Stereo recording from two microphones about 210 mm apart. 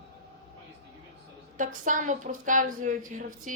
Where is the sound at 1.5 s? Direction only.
35° right (ahead or behind).